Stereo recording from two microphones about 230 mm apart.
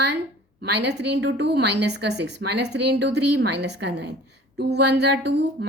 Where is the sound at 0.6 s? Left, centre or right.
Right.